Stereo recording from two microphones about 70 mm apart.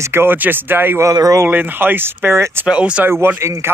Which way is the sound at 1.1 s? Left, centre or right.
Right.